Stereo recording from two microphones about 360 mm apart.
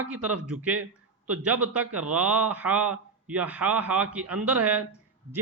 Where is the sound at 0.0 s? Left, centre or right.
Centre.